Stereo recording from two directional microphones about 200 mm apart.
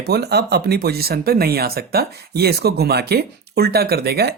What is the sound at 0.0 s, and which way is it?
Speech, 55° right (ahead or behind).